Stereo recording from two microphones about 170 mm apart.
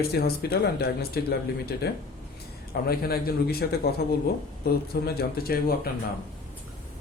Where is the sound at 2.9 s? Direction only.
65° left (ahead or behind).